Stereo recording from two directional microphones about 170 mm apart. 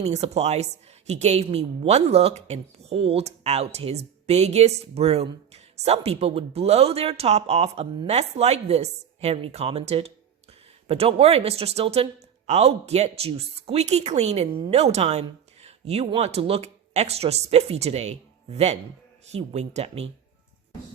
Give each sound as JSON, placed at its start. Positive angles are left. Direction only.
{"t": 0.0, "sound": "speech", "side_deg": -40}